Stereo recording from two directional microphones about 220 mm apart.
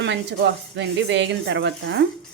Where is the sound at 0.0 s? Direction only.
50° right (ahead or behind).